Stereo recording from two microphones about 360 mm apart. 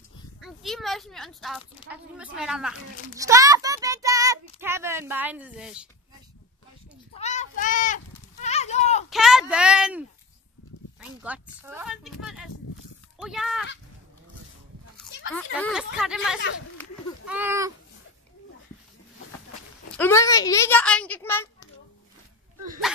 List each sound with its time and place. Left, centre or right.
0.4 s speech: centre
3.2 s child singing: centre
4.6 s speech: centre
7.2 s a sound: centre
9.1 s speech: centre
15.3 s speech: centre
20.0 s a child's voice: centre